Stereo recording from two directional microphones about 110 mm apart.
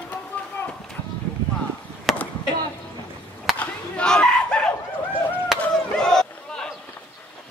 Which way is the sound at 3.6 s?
10° left (ahead or behind).